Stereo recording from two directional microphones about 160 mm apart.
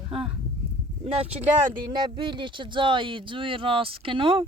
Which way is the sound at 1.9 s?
30° right (ahead or behind).